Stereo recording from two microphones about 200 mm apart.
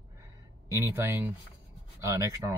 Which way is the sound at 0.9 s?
10° right (ahead or behind).